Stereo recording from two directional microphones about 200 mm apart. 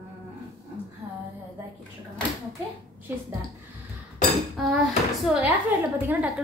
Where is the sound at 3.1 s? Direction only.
10° right (ahead or behind).